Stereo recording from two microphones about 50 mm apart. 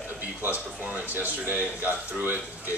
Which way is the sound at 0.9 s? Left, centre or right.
Right.